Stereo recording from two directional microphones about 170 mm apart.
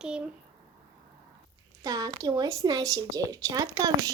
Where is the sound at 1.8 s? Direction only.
20° right (ahead or behind).